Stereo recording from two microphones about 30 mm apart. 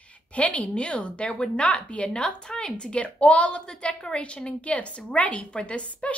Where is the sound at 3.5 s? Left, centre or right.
Left.